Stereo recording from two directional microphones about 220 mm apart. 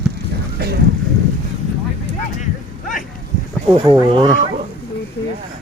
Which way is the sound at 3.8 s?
20° right (ahead or behind).